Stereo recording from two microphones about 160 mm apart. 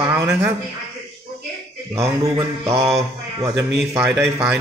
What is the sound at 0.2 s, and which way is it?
Speech, 20° right (ahead or behind).